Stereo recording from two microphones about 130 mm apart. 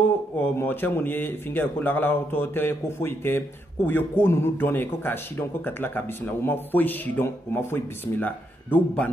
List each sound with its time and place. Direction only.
0.4 s speech: 15° left (ahead or behind)